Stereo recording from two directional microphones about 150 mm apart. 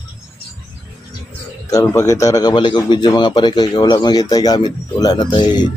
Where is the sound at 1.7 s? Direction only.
20° left (ahead or behind).